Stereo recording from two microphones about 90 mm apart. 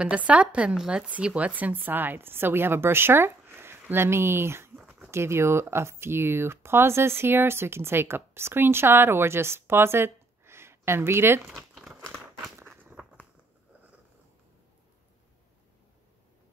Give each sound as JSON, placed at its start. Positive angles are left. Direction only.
{"t": 0.0, "sound": "speech", "side_deg": -15}
{"t": 4.7, "sound": "a sound", "side_deg": -15}
{"t": 5.1, "sound": "speech", "side_deg": -30}
{"t": 11.4, "sound": "crumpling", "side_deg": -5}